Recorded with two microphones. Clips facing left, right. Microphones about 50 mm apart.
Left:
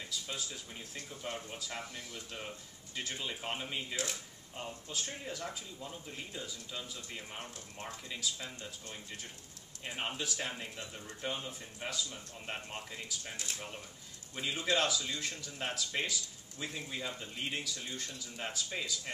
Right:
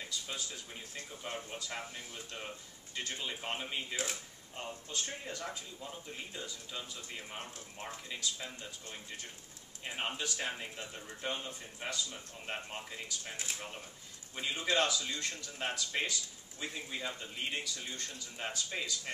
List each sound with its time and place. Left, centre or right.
0.0 s speech: centre
3.0 s speech: centre
3.9 s speech: centre
4.6 s speech: centre
13.3 s speech: centre
14.3 s speech: centre